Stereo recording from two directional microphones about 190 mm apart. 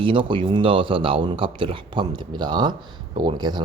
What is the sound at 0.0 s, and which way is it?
Speech, 25° right (ahead or behind).